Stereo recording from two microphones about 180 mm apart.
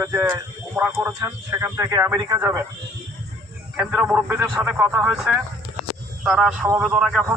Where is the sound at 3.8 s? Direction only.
10° right (ahead or behind).